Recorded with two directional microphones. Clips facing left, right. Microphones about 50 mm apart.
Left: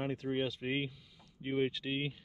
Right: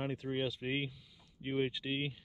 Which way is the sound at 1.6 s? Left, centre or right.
Right.